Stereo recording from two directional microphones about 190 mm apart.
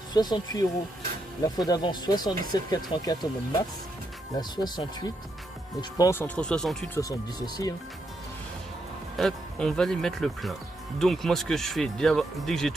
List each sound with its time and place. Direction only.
0.1 s speech: 20° left (ahead or behind)
4.4 s speech: 20° left (ahead or behind); by 6.9 s centre (ahead or behind)
7.0 s speech: 20° left (ahead or behind)
9.1 s speech: centre (ahead or behind)